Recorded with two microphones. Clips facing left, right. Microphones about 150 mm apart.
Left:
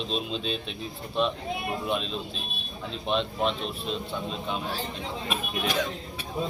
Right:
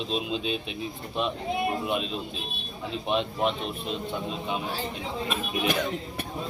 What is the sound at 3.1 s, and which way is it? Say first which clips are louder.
Speech: even; 10° right (ahead or behind).